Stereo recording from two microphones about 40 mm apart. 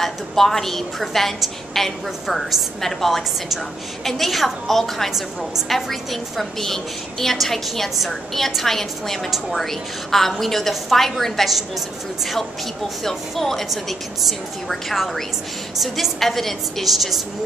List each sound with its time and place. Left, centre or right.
0.0 s a woman's voice: centre
13.0 s a woman's voice: centre
13.7 s a woman's voice: centre
15.8 s a woman's voice: centre